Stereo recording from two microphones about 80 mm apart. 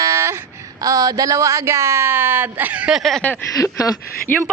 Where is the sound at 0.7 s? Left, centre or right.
Right.